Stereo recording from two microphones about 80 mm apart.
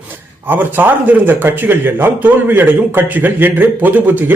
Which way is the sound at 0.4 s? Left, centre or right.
Right.